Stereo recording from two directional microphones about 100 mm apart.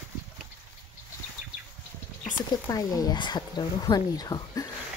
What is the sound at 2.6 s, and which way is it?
Speech, 40° left (ahead or behind).